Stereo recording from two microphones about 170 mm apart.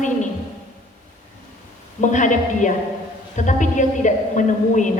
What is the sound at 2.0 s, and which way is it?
A woman's voice, 45° left (ahead or behind).